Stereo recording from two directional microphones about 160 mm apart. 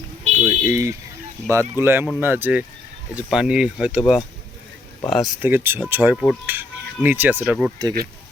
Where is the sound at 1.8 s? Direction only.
15° right (ahead or behind).